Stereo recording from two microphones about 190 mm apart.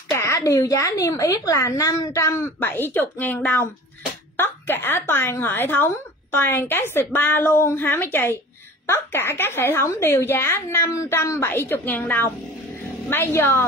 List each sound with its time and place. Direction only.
0.1 s a woman's voice: 15° left (ahead or behind)